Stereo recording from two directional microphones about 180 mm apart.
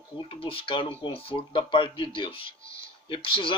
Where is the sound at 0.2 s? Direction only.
30° left (ahead or behind).